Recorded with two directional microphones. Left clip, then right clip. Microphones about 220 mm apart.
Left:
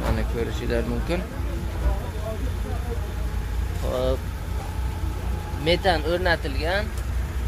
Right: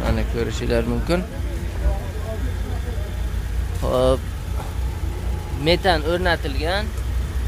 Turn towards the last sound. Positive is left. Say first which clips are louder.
# right 2 dB
turn(degrees=-15)  # may be behind; listen again after turning